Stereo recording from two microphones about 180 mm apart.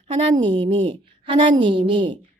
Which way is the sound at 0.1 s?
25° right (ahead or behind).